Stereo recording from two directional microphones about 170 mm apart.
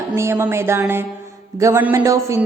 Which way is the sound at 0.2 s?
15° right (ahead or behind).